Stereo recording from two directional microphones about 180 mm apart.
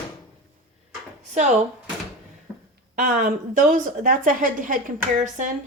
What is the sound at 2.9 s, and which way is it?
A woman's voice, 50° right (ahead or behind).